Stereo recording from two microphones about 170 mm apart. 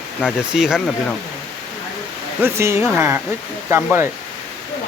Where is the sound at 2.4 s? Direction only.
15° right (ahead or behind).